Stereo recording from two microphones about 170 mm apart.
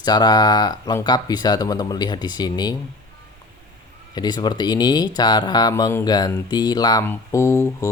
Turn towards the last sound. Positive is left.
turn(degrees=20)  # may be behind; listen again after turning